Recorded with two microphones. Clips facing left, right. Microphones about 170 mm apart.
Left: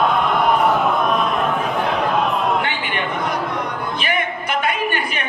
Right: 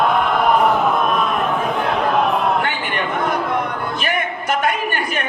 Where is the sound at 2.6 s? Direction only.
45° right (ahead or behind).